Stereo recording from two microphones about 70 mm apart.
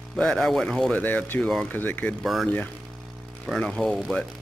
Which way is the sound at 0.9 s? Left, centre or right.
Left.